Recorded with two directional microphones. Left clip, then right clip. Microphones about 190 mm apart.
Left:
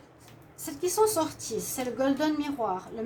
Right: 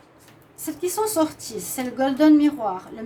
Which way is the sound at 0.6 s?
40° right (ahead or behind).